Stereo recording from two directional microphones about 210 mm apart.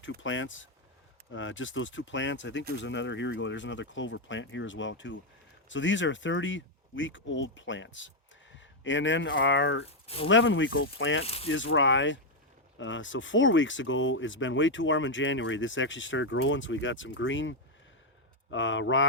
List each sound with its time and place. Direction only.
0.0 s speech: 65° left (ahead or behind)
9.8 s speech: 25° left (ahead or behind)
10.2 s speech: 65° left (ahead or behind)